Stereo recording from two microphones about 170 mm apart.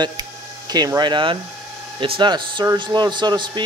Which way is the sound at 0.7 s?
25° right (ahead or behind).